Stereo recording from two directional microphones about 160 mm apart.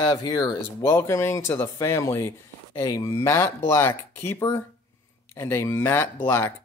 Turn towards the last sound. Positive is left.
turn(degrees=10)  # may be behind; listen again after turning